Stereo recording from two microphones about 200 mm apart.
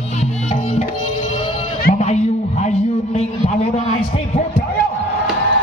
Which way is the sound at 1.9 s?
35° left (ahead or behind).